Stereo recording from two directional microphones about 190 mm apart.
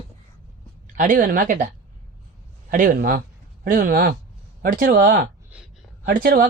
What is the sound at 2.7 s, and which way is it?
Speech, 50° right (ahead or behind).